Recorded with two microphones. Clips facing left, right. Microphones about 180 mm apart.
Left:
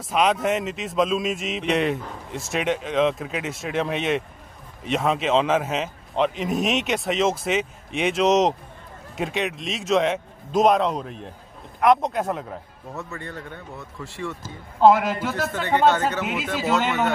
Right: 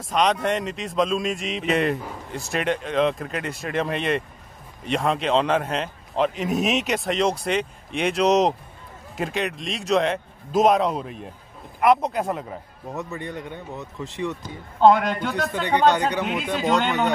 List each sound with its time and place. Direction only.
0.0 s speech: 5° left (ahead or behind)
12.9 s speech: 15° right (ahead or behind)
14.4 s speech: 5° left (ahead or behind)
15.9 s speech: 15° right (ahead or behind)
16.2 s speech: 5° left (ahead or behind)